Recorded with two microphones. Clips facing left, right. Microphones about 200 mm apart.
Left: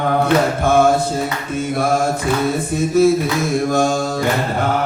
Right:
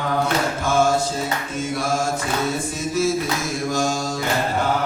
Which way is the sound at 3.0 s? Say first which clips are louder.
Left 9 dB; 55° left (ahead or behind).